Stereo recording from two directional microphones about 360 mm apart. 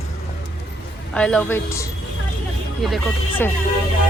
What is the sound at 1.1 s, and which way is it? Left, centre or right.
Speech, centre.